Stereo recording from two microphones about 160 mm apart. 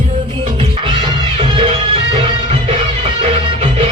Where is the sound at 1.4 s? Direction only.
35° right (ahead or behind).